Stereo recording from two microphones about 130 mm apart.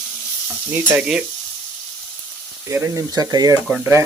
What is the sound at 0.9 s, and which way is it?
Stir, 10° right (ahead or behind).